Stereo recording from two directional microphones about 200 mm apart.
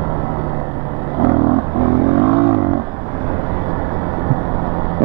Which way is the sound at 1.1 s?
20° right (ahead or behind).